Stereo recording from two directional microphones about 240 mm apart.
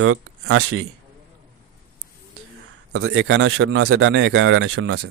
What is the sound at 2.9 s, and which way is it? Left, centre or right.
Speech, right.